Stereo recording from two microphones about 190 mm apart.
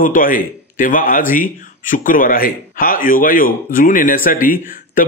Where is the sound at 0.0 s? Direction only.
45° left (ahead or behind).